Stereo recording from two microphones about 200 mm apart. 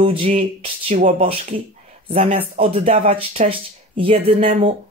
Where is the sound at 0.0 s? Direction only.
30° right (ahead or behind).